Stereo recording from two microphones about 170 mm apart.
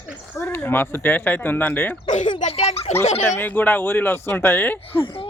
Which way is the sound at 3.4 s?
10° left (ahead or behind).